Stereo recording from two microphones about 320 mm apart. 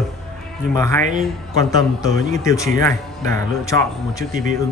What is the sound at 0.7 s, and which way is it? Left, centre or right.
A man's voice, centre.